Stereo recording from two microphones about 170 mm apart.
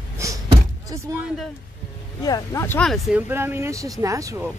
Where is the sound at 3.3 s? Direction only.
15° right (ahead or behind).